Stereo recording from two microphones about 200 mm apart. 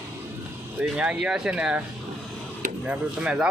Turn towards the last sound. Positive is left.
turn(degrees=-5)  # may be behind; listen again after turning